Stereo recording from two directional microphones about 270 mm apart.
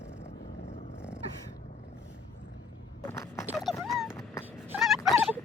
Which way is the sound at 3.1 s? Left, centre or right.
Centre.